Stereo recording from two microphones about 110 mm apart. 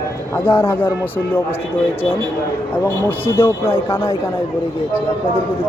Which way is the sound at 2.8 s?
20° left (ahead or behind).